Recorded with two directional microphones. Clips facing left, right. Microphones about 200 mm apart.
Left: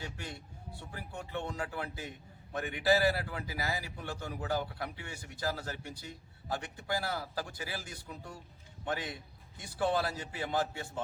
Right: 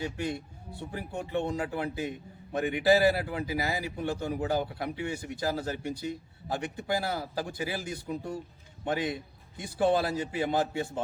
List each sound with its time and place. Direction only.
0.0 s a man's voice: 15° right (ahead or behind)